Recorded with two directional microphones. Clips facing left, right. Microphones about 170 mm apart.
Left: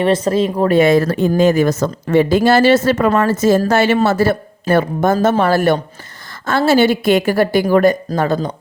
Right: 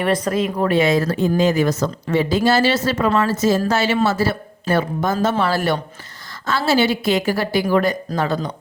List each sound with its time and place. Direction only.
0.0 s a woman's voice: 25° left (ahead or behind)
0.7 s speech: 55° left (ahead or behind)
1.3 s a woman's voice: 50° left (ahead or behind)